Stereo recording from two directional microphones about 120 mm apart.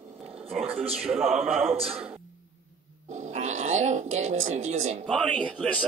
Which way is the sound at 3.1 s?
80° right.